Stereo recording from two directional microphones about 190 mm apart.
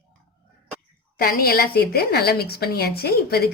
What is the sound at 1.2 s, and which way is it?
A woman's voice, 55° left (ahead or behind).